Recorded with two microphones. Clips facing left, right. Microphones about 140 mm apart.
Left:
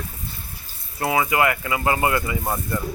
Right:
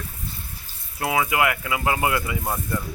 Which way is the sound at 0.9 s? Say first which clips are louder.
Left 2 dB; centre (ahead or behind).